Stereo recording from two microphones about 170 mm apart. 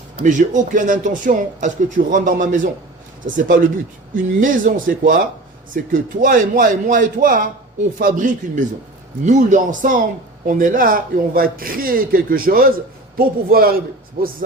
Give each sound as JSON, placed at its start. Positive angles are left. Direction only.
{"t": 0.2, "sound": "speech", "side_deg": -50}